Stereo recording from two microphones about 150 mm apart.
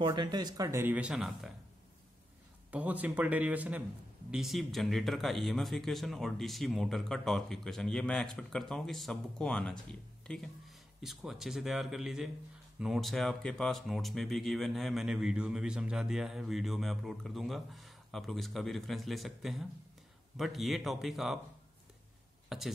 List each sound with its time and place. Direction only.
0.1 s speech: 30° right (ahead or behind); by 1.5 s centre (ahead or behind)
2.7 s speech: 10° right (ahead or behind)
22.5 s speech: centre (ahead or behind)